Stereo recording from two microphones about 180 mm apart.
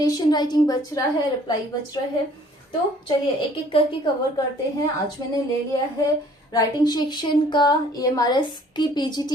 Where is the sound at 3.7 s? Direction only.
30° left (ahead or behind).